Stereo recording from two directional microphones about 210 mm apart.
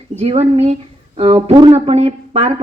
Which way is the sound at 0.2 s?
30° right (ahead or behind).